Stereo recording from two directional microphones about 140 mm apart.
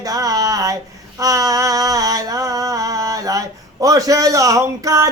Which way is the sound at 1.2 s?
25° right (ahead or behind).